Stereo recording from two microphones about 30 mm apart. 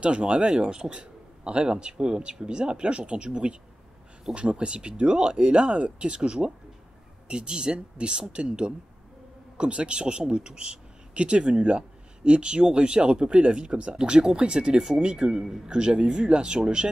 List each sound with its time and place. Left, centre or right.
0.0 s speech: right
11.1 s speech: right; by 15.7 s centre
15.7 s speech: right